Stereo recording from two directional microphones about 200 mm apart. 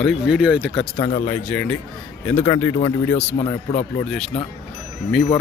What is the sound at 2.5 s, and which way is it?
Speech, 20° left (ahead or behind).